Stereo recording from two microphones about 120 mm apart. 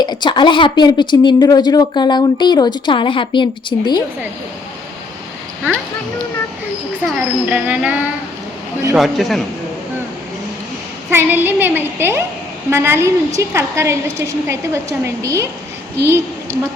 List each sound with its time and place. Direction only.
0.0 s speech: 35° left (ahead or behind)
7.2 s a woman's voice: 10° right (ahead or behind)
11.1 s a woman's voice: 15° right (ahead or behind)